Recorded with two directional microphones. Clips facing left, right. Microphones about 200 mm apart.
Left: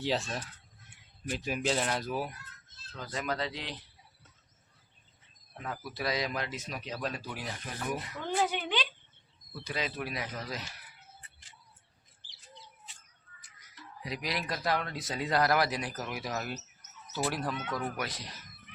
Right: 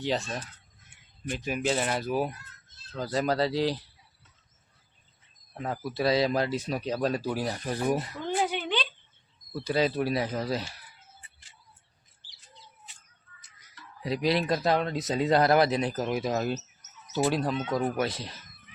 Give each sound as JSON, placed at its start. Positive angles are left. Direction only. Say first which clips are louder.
{"t": 0.0, "sound": "speech", "louder": "right 2 dB", "side_deg": 0}
{"t": 2.0, "sound": "speech", "louder": "right 6 dB", "side_deg": -20}
{"t": 2.9, "sound": "speech", "louder": "right 8 dB", "side_deg": -35}
{"t": 5.5, "sound": "speech", "louder": "right 7 dB", "side_deg": -30}
{"t": 9.5, "sound": "speech", "louder": "right 10 dB", "side_deg": -35}
{"t": 14.0, "sound": "speech", "louder": "right 10 dB", "side_deg": -30}